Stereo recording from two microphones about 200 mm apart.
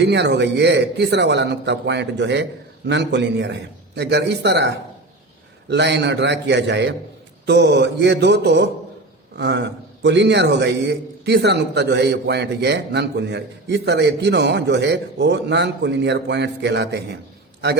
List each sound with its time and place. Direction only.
0.0 s a man's voice: 60° right (ahead or behind)